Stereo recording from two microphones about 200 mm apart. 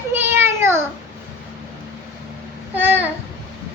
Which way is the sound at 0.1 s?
10° right (ahead or behind).